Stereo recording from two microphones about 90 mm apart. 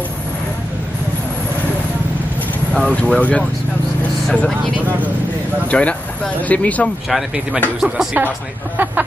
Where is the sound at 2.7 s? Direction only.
10° left (ahead or behind).